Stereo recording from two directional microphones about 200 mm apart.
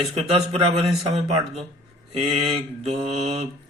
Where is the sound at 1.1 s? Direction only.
35° right (ahead or behind).